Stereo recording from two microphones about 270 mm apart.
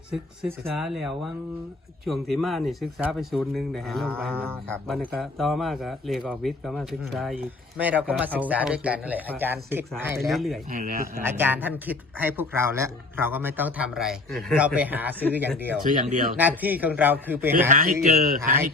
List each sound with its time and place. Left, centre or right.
0.8 s speech: centre
10.7 s speech: right
11.2 s speech: centre
15.9 s speech: right
16.4 s speech: centre
17.7 s speech: right